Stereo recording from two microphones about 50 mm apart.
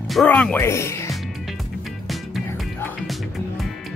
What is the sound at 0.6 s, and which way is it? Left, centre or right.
Speech, left.